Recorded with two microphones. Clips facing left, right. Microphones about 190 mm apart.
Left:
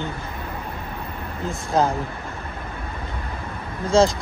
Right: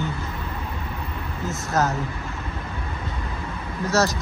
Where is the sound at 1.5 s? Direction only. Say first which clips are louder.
Left 3 dB; 30° left (ahead or behind).